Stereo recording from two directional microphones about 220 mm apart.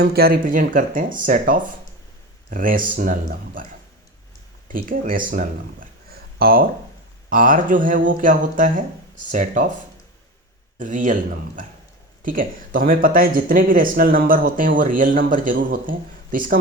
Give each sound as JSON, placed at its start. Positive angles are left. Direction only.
{"t": 0.0, "sound": "speech", "side_deg": -45}
{"t": 4.7, "sound": "speech", "side_deg": -40}
{"t": 10.8, "sound": "speech", "side_deg": -35}